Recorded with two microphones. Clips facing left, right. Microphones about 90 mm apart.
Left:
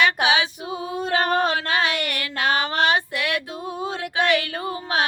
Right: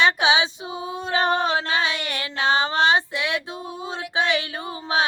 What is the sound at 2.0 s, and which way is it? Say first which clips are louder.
Female singing: right 1 dB; 25° right (ahead or behind).